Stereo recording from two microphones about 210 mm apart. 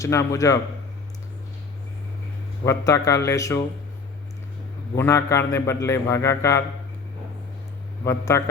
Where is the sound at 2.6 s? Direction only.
15° left (ahead or behind).